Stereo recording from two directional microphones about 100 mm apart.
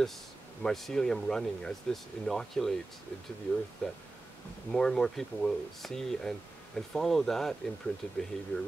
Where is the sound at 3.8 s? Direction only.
10° left (ahead or behind).